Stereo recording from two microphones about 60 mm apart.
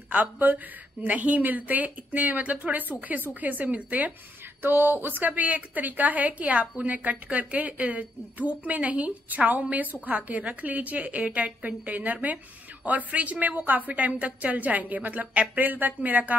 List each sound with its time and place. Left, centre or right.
0.1 s a woman's voice: right
4.6 s a woman's voice: right